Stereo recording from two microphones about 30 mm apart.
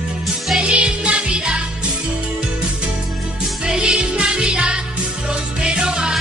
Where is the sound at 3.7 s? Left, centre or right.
Right.